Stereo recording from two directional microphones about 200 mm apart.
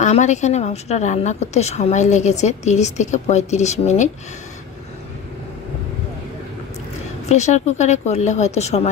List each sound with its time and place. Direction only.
0.0 s a woman's voice: 35° left (ahead or behind)
7.3 s a woman's voice: 35° left (ahead or behind)